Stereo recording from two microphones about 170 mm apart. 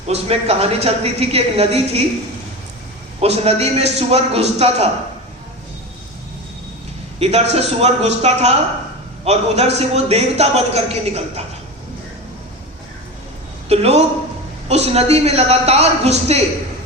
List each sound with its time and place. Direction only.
0.1 s a man's voice: 40° right (ahead or behind)
3.2 s a man's voice: 40° right (ahead or behind)
7.2 s a man's voice: 40° right (ahead or behind)
13.7 s a man's voice: 40° right (ahead or behind)